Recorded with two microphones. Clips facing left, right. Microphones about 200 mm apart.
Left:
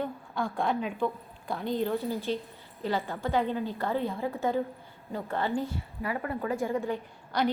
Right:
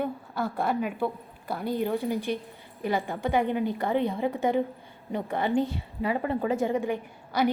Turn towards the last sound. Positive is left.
turn(degrees=-15)  # may be behind; listen again after turning